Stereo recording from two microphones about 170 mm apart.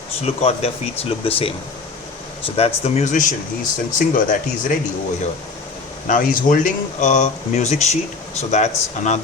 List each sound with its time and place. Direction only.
0.2 s speech: 35° left (ahead or behind)
2.6 s speech: 40° left (ahead or behind)
6.1 s speech: 50° left (ahead or behind)